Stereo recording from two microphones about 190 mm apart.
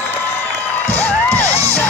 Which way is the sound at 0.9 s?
10° left (ahead or behind).